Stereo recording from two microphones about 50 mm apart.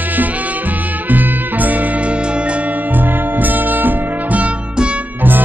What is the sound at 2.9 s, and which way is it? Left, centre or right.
Music, right.